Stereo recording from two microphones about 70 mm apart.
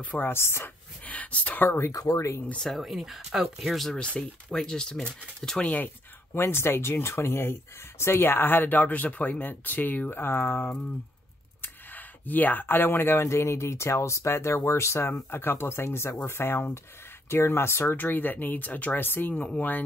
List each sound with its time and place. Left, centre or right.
0.0 s speech: left
0.3 s speech: left
1.0 s speech: left
1.8 s speech: left
2.7 s speech: centre
4.0 s speech: centre
6.3 s speech: left
19.3 s speech: centre